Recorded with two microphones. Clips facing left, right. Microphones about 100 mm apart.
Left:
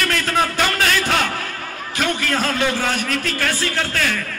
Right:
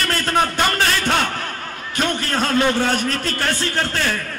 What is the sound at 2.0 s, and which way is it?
A man's voice, 35° right (ahead or behind).